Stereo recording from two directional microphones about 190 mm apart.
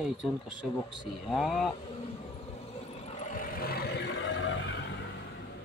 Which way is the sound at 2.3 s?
35° left (ahead or behind).